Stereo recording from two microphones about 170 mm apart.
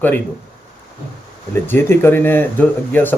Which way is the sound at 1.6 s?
10° left (ahead or behind).